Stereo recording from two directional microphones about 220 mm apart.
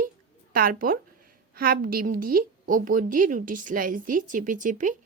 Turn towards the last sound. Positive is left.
turn(degrees=-35)  # may be behind; listen again after turning